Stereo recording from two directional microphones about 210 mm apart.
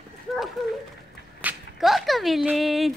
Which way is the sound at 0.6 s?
Centre (ahead or behind).